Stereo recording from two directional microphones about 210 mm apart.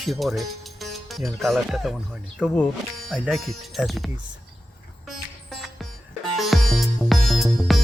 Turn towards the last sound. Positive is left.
turn(degrees=0)  # may be behind; listen again after turning